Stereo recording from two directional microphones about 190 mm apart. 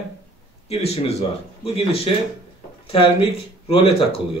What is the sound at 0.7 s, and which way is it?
Speech, 30° left (ahead or behind).